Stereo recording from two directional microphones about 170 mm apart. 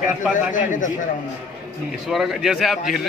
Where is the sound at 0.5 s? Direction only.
50° left (ahead or behind).